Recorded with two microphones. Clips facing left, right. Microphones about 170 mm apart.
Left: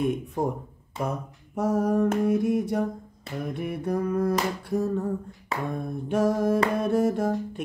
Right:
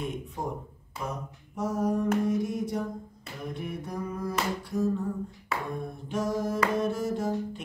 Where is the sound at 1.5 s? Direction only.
60° left (ahead or behind).